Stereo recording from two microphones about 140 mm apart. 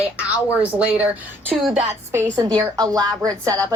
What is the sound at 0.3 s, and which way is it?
A woman's voice, 10° right (ahead or behind).